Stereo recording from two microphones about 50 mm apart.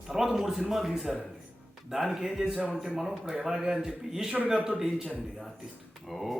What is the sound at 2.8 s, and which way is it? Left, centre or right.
A man's voice, centre.